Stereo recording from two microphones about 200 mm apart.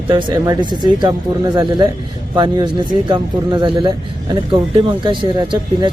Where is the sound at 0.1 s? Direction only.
25° right (ahead or behind).